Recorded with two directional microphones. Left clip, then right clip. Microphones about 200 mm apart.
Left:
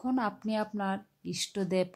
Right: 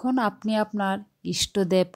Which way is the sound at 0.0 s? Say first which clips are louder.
Right 7 dB; 25° right (ahead or behind).